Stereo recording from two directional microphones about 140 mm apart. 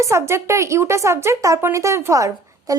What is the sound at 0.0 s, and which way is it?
Speech, 20° right (ahead or behind).